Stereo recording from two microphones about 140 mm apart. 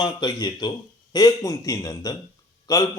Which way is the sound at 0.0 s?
30° left (ahead or behind).